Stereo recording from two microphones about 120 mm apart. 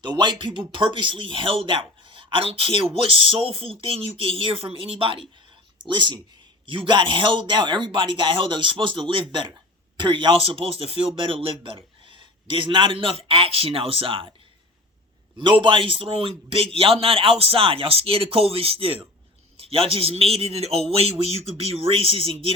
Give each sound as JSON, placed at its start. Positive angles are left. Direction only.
{"t": 0.0, "sound": "speech", "side_deg": -40}
{"t": 15.4, "sound": "a man's voice", "side_deg": -45}